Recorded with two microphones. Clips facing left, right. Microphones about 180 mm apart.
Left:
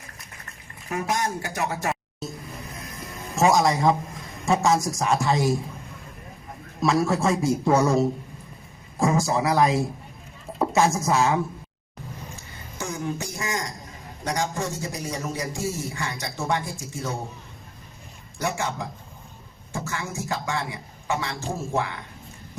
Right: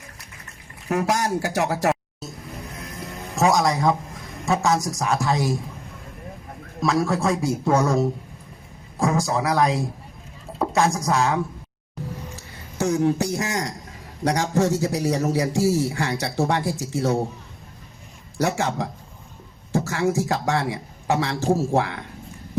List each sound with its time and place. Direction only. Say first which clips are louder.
0.9 s a man's voice: right 4 dB; 75° right (ahead or behind)
3.3 s a man's voice: even; centre (ahead or behind)
6.8 s a man's voice: even; centre (ahead or behind)
12.4 s a man's voice: right 11 dB; 70° right (ahead or behind)
18.3 s a man's voice: right 5 dB; 70° right (ahead or behind)
19.9 s a man's voice: right 8 dB; 70° right (ahead or behind)
21.3 s speech: right 10 dB; 40° right (ahead or behind)
21.7 s a man's voice: right 5 dB; 70° right (ahead or behind)